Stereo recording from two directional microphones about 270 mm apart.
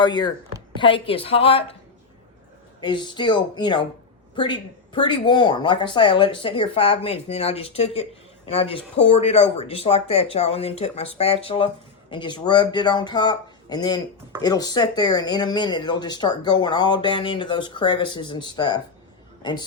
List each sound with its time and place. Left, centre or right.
0.0 s speech: centre
2.8 s speech: centre
4.9 s a man's voice: centre